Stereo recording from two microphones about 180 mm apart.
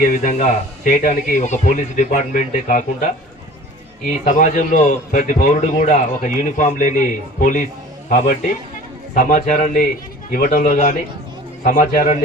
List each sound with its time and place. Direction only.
0.0 s speech: 45° left (ahead or behind)
4.2 s speech: 45° left (ahead or behind)